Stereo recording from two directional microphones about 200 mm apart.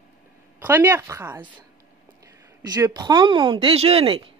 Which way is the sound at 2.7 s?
20° right (ahead or behind).